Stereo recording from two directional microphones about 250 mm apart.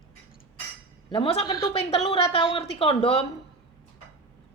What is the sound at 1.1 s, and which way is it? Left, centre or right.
A woman's voice, centre.